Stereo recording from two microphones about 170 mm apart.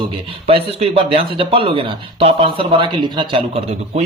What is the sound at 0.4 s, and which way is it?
Speech, 35° right (ahead or behind).